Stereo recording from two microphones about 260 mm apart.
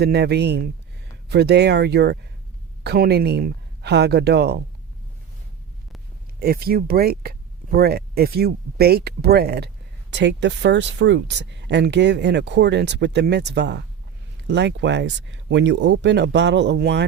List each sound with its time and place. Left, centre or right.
0.0 s speech: right
6.4 s speech: right